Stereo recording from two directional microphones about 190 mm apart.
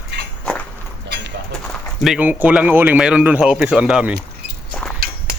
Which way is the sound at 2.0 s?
5° right (ahead or behind).